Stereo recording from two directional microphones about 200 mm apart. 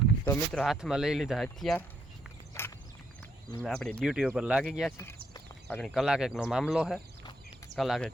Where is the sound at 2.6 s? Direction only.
10° left (ahead or behind).